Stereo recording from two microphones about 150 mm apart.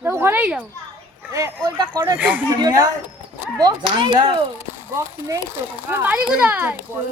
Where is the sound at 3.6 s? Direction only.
30° right (ahead or behind); by 6.8 s 15° right (ahead or behind).